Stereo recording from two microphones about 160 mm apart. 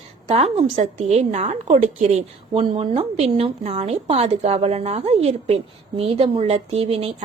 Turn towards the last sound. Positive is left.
turn(degrees=-40)  # may be behind; listen again after turning